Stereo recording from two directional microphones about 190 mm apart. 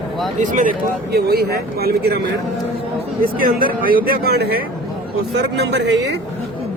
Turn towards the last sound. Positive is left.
turn(degrees=-65)  # may be behind; listen again after turning